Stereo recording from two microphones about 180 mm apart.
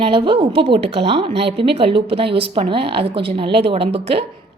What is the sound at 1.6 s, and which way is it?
A woman's voice, 30° right (ahead or behind).